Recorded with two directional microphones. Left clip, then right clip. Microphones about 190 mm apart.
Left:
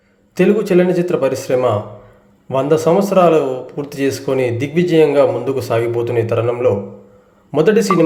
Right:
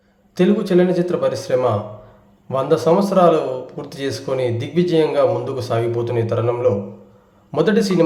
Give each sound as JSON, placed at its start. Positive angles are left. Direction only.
{"t": 0.3, "sound": "a man's voice", "side_deg": 15}